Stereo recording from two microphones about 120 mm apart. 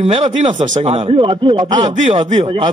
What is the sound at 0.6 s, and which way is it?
A man's voice, 85° right.